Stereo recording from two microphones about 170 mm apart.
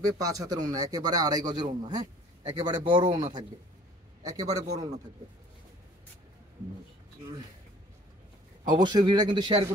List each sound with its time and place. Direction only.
0.2 s speech: 20° right (ahead or behind)
8.7 s speech: 25° right (ahead or behind)